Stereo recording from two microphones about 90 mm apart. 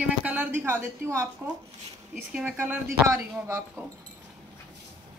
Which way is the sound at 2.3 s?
20° right (ahead or behind).